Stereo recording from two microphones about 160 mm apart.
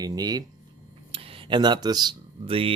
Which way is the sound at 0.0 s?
25° right (ahead or behind).